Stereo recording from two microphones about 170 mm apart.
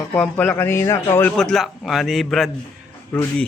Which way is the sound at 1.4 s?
Centre (ahead or behind).